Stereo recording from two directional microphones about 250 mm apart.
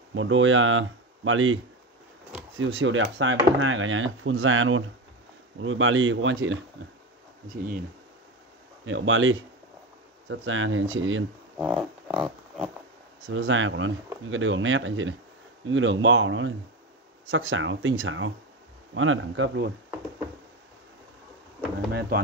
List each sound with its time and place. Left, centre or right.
0.1 s speech: right
8.8 s speech: right
11.5 s a sound: centre
13.3 s speech: right